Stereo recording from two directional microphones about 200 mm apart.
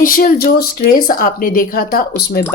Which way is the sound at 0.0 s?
45° left (ahead or behind).